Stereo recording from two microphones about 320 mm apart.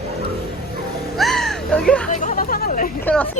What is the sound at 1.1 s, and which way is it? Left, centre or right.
Music, centre.